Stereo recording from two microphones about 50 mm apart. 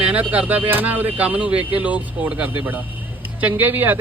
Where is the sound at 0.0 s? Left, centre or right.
Right.